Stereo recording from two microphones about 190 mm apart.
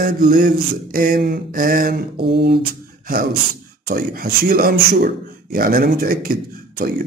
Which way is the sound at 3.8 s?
50° right (ahead or behind).